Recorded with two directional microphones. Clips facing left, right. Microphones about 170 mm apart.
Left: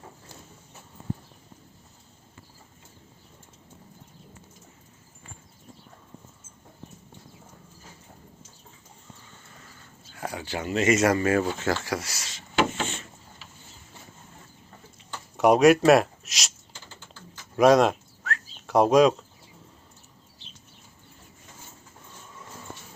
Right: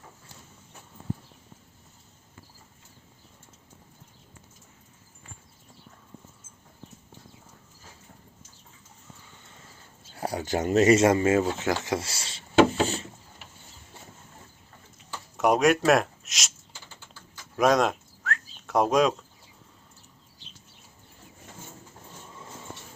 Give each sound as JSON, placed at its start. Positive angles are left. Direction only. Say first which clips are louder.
{"t": 10.2, "sound": "speech", "louder": "right 4 dB", "side_deg": -35}
{"t": 11.4, "sound": "wood", "louder": "even", "side_deg": -15}
{"t": 15.1, "sound": "a sound", "louder": "left 3 dB", "side_deg": 0}
{"t": 17.6, "sound": "bird", "louder": "left 4 dB", "side_deg": 0}